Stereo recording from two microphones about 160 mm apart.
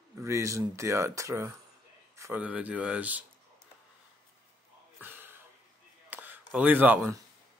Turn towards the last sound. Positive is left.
turn(degrees=-10)  # may be behind; listen again after turning